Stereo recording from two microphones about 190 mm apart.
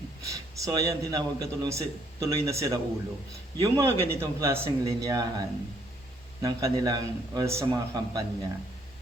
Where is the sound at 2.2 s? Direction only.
15° right (ahead or behind).